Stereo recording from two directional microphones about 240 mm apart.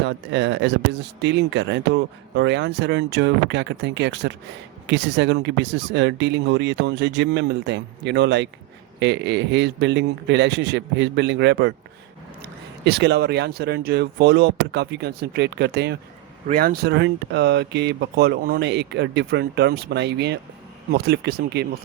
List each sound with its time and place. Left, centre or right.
0.0 s speech: right